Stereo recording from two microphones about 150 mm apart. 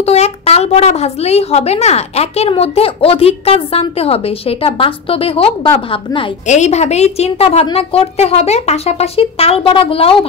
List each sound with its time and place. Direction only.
0.0 s a woman's voice: 45° left (ahead or behind)
6.4 s a woman's voice: 50° left (ahead or behind)